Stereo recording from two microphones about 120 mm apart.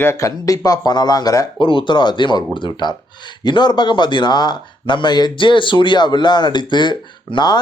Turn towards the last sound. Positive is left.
turn(degrees=40)  # may be behind; listen again after turning